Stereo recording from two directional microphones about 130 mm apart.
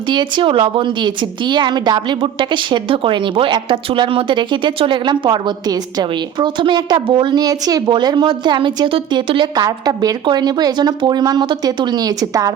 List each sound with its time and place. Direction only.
0.1 s a woman's voice: 35° right (ahead or behind)